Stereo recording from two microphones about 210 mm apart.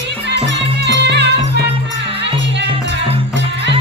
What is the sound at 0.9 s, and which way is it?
Music, 55° right (ahead or behind).